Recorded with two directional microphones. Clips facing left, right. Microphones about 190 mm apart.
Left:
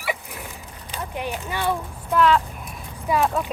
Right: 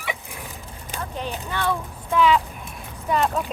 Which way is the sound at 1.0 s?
15° left (ahead or behind).